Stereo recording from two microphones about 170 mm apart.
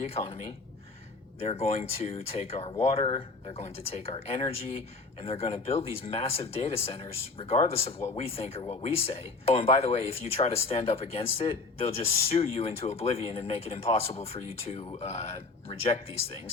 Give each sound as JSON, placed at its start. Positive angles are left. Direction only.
{"t": 0.0, "sound": "speech", "side_deg": 35}